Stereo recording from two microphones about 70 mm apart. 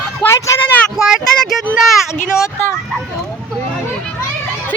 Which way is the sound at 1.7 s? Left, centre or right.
Centre.